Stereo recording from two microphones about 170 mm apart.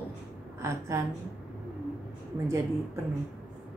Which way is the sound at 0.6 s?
15° right (ahead or behind).